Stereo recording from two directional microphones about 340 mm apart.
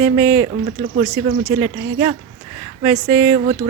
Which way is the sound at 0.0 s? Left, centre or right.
Centre.